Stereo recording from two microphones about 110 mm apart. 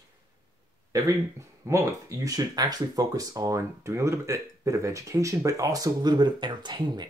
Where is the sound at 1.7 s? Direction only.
25° right (ahead or behind).